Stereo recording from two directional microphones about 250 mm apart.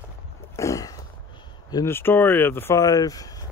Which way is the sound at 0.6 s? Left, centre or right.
Centre.